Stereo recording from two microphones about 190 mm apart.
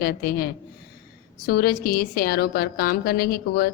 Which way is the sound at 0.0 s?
55° left (ahead or behind).